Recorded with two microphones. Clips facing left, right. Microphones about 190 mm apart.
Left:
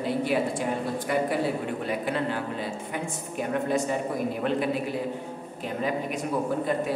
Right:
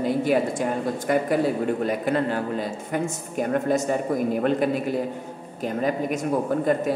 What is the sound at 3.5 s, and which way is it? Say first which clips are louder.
Speech: right 3 dB; 45° right (ahead or behind).